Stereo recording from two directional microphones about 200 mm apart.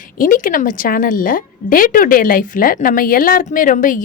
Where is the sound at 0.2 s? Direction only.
40° left (ahead or behind).